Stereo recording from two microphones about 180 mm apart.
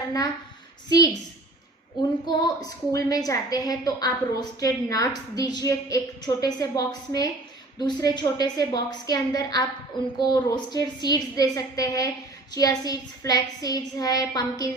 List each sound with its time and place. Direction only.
0.9 s a woman's voice: 20° left (ahead or behind)
2.2 s a woman's voice: 20° left (ahead or behind)